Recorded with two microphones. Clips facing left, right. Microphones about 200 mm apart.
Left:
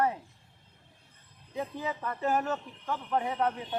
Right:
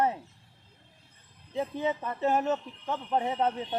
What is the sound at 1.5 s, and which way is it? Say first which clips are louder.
Speech: right 5 dB; 25° right (ahead or behind).